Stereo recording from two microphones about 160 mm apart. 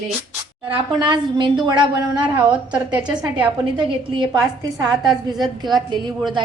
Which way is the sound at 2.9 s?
5° right (ahead or behind).